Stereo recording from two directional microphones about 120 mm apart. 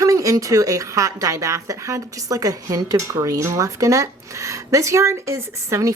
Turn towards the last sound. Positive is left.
turn(degrees=-25)  # may be behind; listen again after turning